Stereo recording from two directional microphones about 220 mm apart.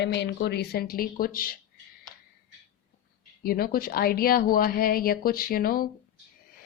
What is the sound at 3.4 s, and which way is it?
A woman's voice, 40° left (ahead or behind).